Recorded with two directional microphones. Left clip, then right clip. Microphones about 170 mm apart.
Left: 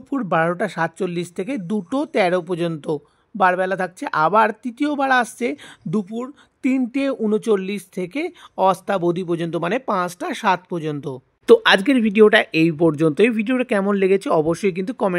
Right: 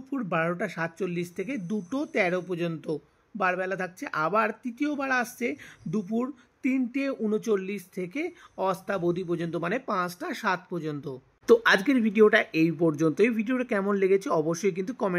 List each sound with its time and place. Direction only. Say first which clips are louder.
0.1 s speech: left 9 dB; 35° left (ahead or behind)